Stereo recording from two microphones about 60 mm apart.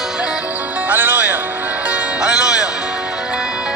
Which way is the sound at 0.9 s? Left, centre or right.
Right.